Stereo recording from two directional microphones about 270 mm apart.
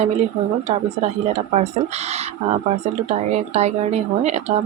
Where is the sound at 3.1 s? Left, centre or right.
Right.